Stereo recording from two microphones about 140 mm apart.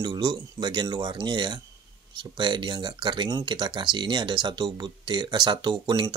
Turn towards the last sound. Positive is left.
turn(degrees=-30)  # may be behind; listen again after turning